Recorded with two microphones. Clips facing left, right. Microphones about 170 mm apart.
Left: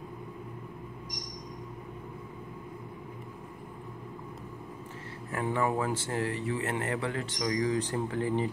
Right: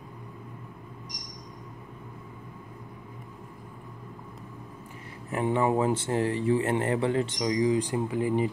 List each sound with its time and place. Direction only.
5.3 s speech: 20° right (ahead or behind)